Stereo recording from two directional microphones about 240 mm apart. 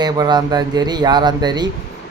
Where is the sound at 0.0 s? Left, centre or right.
Centre.